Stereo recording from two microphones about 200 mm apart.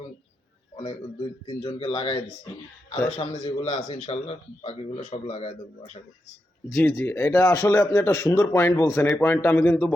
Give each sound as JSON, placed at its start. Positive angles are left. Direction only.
{"t": 1.5, "sound": "a man's voice", "side_deg": 30}
{"t": 6.7, "sound": "speech", "side_deg": 10}